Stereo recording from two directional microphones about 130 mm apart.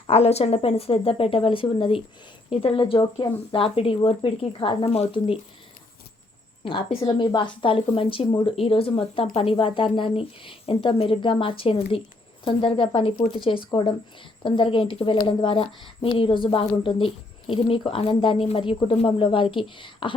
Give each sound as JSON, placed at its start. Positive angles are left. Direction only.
{"t": 0.1, "sound": "a woman's voice", "side_deg": 55}
{"t": 6.7, "sound": "a woman's voice", "side_deg": 40}